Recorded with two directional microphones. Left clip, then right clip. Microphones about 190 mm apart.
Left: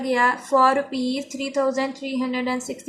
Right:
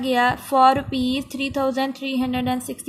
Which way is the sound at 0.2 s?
50° right (ahead or behind).